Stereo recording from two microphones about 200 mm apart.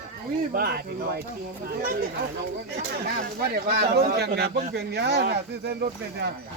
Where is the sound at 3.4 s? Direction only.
50° right (ahead or behind).